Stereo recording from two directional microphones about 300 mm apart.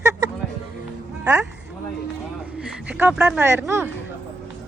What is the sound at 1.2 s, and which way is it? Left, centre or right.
Speech, centre.